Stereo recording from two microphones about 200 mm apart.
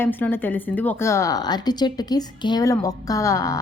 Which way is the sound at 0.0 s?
10° left (ahead or behind).